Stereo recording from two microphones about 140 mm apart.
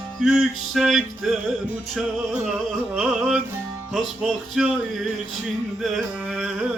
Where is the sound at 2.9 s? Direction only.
5° right (ahead or behind).